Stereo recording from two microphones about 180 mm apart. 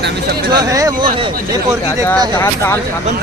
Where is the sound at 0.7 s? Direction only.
20° right (ahead or behind).